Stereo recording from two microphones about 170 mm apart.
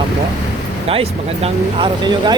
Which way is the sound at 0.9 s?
35° right (ahead or behind).